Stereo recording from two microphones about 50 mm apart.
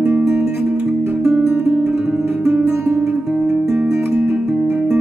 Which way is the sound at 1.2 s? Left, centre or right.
Right.